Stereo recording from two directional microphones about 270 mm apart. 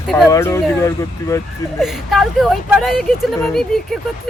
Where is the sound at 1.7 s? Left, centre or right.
Centre.